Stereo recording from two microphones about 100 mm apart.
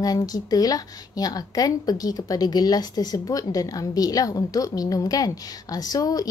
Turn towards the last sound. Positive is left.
turn(degrees=40)  # may be behind; listen again after turning